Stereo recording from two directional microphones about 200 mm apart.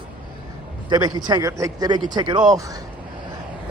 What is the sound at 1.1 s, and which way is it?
A man's voice, 20° right (ahead or behind).